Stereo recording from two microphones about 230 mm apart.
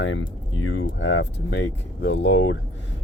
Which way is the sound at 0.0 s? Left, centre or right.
Left.